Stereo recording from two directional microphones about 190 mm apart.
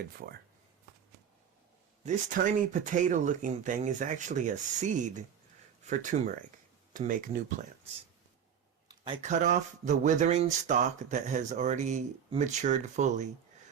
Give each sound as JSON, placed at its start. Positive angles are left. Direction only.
{"t": 0.0, "sound": "speech", "side_deg": -55}
{"t": 2.0, "sound": "speech", "side_deg": -45}
{"t": 9.2, "sound": "speech", "side_deg": -40}